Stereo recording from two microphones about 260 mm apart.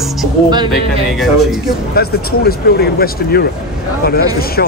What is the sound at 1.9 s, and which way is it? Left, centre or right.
Speech, left.